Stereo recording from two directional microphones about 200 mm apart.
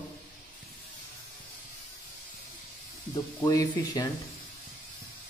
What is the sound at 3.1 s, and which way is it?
Speech, 15° left (ahead or behind).